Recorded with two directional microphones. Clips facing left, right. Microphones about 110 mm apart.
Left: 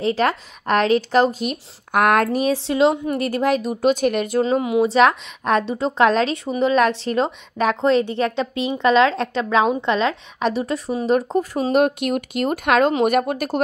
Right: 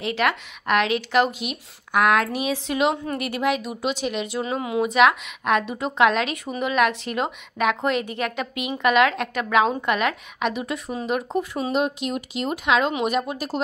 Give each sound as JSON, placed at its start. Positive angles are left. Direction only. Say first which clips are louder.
{"t": 0.0, "sound": "speech", "louder": "left 4 dB", "side_deg": 35}
{"t": 4.4, "sound": "a woman's voice", "louder": "left 6 dB", "side_deg": 30}
{"t": 11.7, "sound": "speech", "louder": "left 7 dB", "side_deg": 55}